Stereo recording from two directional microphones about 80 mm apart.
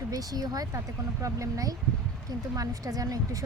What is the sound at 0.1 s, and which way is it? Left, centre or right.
Speech, right.